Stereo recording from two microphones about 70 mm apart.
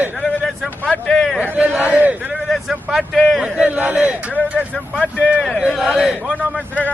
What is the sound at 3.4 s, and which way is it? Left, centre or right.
Speech, centre.